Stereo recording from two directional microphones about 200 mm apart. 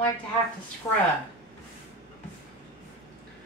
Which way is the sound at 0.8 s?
15° left (ahead or behind).